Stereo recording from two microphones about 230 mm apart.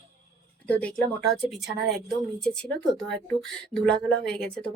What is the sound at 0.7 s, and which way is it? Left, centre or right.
Speech, centre.